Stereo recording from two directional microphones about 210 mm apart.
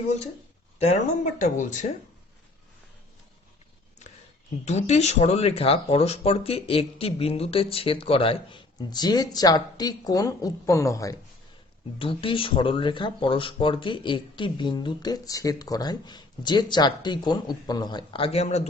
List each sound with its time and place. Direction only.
0.8 s speech: 35° left (ahead or behind)
4.6 s speech: 30° left (ahead or behind); by 11.2 s 15° left (ahead or behind)
11.9 s speech: 25° left (ahead or behind)